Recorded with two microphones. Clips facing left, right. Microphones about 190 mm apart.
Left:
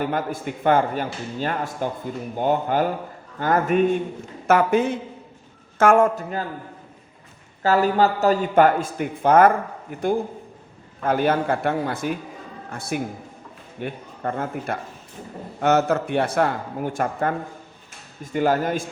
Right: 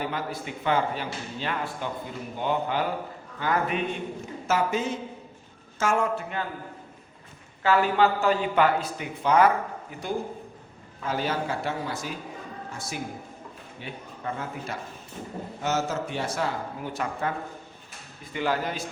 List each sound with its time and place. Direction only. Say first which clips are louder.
0.0 s a man's voice: left 6 dB; 50° left (ahead or behind)
4.4 s a man's voice: left 8 dB; 60° left (ahead or behind)
7.6 s a man's voice: left 3 dB; 40° left (ahead or behind)